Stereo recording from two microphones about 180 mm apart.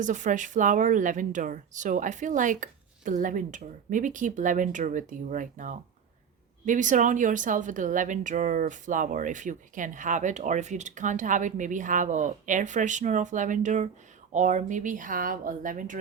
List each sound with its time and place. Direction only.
0.0 s speech: 45° right (ahead or behind)